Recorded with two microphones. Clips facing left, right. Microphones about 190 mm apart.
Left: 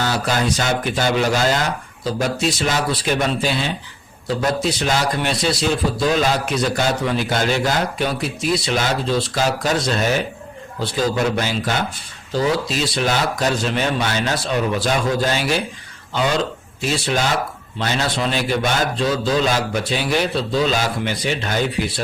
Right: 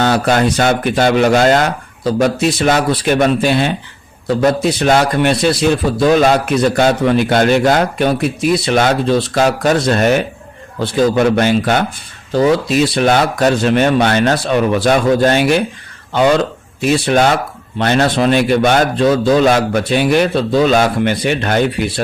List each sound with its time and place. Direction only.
0.0 s a man's voice: 65° right (ahead or behind)
16.8 s a man's voice: 60° right (ahead or behind)